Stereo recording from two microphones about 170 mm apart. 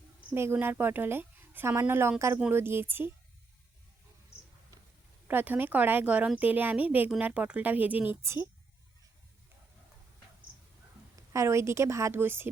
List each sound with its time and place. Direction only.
0.2 s a woman's voice: 10° right (ahead or behind)
5.3 s a woman's voice: 10° right (ahead or behind)
11.3 s a woman's voice: 15° right (ahead or behind)